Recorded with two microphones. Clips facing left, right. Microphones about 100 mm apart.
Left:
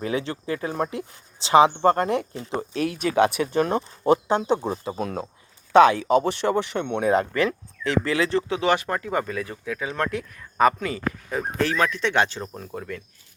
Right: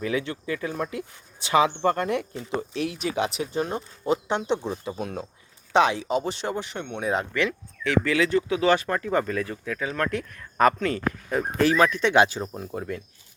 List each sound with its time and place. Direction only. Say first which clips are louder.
0.0 s speech: left 1 dB; 30° left (ahead or behind)
3.0 s speech: left 9 dB; 55° left (ahead or behind)
4.3 s speech: left 3 dB; 40° left (ahead or behind); by 6.8 s 65° left (ahead or behind)
7.1 s speech: left 3 dB; 40° left (ahead or behind)
8.7 s speech: right 1 dB; 15° left (ahead or behind)
10.2 s speech: left 2 dB; 5° left (ahead or behind)
11.3 s speech: right 3 dB; centre (ahead or behind)